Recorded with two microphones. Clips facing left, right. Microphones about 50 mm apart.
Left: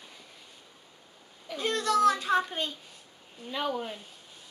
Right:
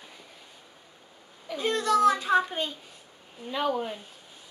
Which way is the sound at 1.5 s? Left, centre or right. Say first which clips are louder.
Right 2 dB; centre.